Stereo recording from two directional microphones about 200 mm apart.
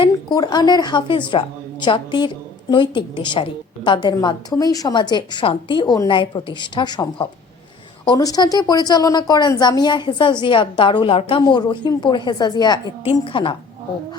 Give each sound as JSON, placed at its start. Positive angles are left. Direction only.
{"t": 0.0, "sound": "a woman's voice", "side_deg": 20}